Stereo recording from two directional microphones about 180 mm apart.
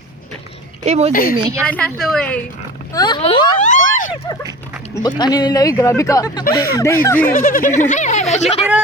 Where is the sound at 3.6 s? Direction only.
45° left (ahead or behind).